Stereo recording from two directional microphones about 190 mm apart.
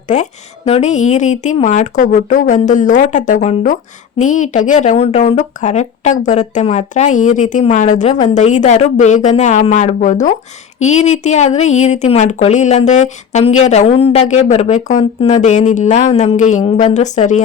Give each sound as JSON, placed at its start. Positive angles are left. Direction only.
{"t": 0.1, "sound": "speech", "side_deg": 35}